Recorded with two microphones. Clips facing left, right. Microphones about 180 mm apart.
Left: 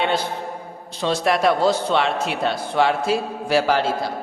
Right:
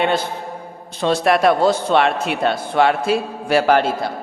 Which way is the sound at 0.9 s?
55° right (ahead or behind).